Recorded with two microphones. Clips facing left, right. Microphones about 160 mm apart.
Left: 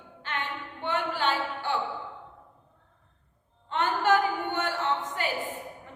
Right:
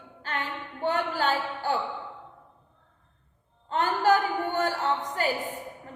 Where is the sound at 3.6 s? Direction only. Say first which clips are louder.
Right 2 dB; 40° right (ahead or behind).